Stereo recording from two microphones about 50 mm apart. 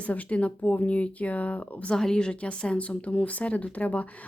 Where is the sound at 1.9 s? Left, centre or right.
Centre.